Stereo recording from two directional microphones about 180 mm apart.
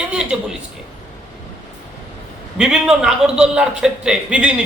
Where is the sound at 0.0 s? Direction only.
5° right (ahead or behind).